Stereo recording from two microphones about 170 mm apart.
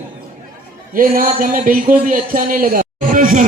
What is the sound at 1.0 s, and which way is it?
Speech, 55° right (ahead or behind).